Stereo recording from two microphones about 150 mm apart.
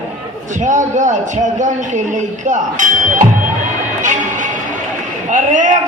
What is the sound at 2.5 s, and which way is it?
Speech, 60° right (ahead or behind).